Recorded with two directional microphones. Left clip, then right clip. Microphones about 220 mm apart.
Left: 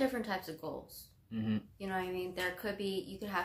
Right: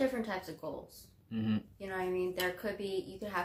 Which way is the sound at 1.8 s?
15° left (ahead or behind).